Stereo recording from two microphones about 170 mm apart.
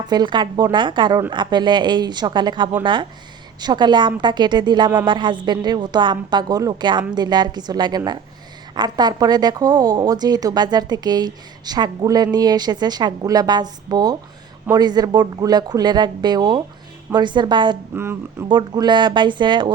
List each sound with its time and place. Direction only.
0.1 s speech: 25° right (ahead or behind)
17.9 s speech: 15° right (ahead or behind)
18.4 s speech: 25° right (ahead or behind)